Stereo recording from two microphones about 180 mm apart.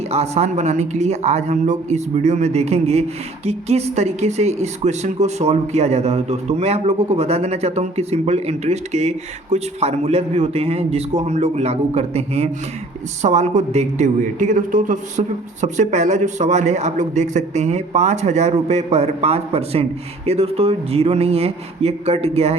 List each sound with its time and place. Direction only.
0.1 s speech: 35° right (ahead or behind)